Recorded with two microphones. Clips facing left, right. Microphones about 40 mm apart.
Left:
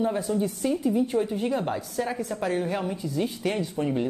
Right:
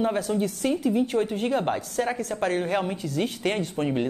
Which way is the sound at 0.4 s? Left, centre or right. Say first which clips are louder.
Right 1 dB; right.